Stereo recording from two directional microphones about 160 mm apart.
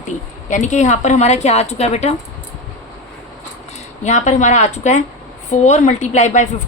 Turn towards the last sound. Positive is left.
turn(degrees=45)  # may be behind; listen again after turning